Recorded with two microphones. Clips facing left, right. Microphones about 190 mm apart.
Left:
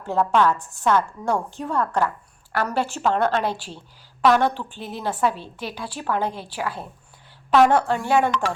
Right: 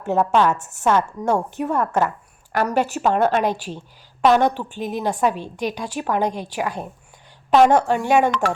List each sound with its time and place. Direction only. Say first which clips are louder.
0.0 s a woman's voice: right 2 dB; 20° right (ahead or behind)
8.3 s speech: right 3 dB; 50° right (ahead or behind)